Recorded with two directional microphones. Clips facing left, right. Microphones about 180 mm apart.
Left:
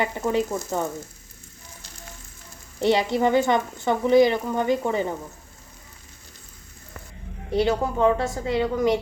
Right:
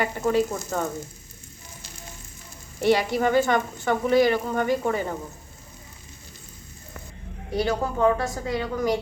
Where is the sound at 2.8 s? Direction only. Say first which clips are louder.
Left 1 dB; 20° left (ahead or behind).